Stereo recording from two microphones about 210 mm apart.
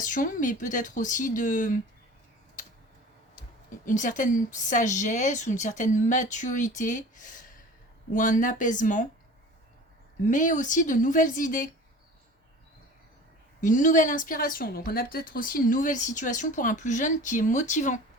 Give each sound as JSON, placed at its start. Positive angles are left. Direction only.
{"t": 0.0, "sound": "a woman's voice", "side_deg": 40}
{"t": 3.8, "sound": "a woman's voice", "side_deg": 35}
{"t": 10.2, "sound": "a woman's voice", "side_deg": 40}
{"t": 13.6, "sound": "a woman's voice", "side_deg": 40}